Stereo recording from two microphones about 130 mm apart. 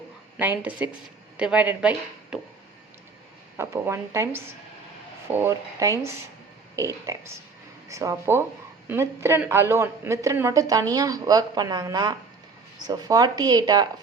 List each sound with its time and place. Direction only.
0.7 s speech: 10° right (ahead or behind)
3.6 s speech: 20° right (ahead or behind)
7.1 s speech: 25° right (ahead or behind)